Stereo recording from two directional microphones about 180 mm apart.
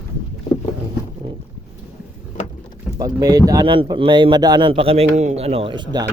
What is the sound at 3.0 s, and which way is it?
Speech, 20° right (ahead or behind).